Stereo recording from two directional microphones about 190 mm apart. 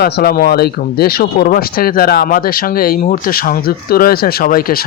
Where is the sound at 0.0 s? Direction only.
55° left (ahead or behind).